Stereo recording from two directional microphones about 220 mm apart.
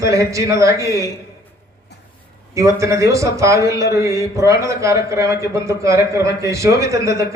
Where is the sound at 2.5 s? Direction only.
15° right (ahead or behind).